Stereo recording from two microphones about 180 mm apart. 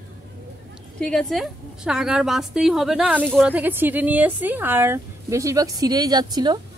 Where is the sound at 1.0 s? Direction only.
Centre (ahead or behind).